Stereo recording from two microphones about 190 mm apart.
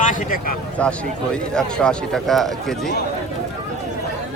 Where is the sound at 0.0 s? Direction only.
45° left (ahead or behind).